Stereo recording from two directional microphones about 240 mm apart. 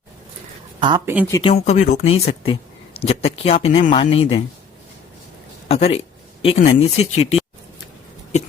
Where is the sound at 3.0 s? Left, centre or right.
Left.